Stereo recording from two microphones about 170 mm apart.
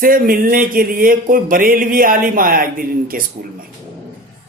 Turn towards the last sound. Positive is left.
turn(degrees=-55)  # may be behind; listen again after turning